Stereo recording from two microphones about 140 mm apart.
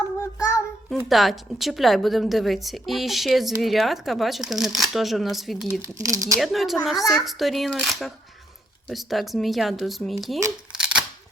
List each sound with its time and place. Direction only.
0.2 s child singing: 25° left (ahead or behind)
1.0 s a woman's voice: centre (ahead or behind)
5.8 s speech: 25° right (ahead or behind)
6.4 s a woman's voice: centre (ahead or behind)
10.7 s scissors: 5° right (ahead or behind)